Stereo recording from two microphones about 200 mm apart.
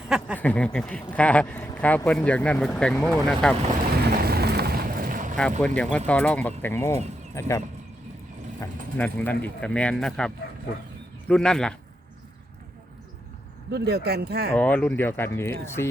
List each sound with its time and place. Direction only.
0.3 s speech: 5° left (ahead or behind)
4.3 s vehicle: 55° right (ahead or behind)
5.4 s speech: 5° left (ahead or behind)
9.0 s speech: 10° left (ahead or behind)
13.7 s speech: 55° right (ahead or behind)
14.5 s speech: 10° left (ahead or behind)